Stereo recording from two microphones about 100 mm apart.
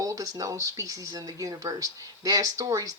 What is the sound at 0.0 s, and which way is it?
Speech, 35° right (ahead or behind).